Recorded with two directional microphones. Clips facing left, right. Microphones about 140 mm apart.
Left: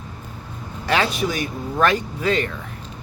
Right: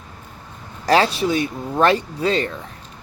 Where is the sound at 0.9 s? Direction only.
35° right (ahead or behind).